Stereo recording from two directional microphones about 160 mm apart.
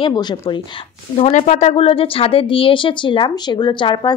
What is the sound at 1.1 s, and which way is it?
A woman's voice, 40° left (ahead or behind).